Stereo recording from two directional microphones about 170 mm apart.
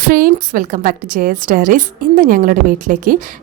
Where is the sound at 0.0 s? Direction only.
60° right (ahead or behind).